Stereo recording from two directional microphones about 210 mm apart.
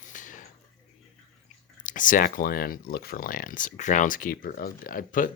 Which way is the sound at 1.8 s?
40° left (ahead or behind).